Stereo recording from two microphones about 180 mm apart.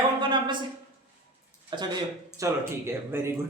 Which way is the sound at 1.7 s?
25° right (ahead or behind).